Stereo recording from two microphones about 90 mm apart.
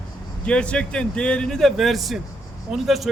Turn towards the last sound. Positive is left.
turn(degrees=0)  # may be behind; listen again after turning